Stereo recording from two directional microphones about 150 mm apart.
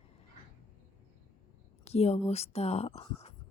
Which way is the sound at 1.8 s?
45° left (ahead or behind).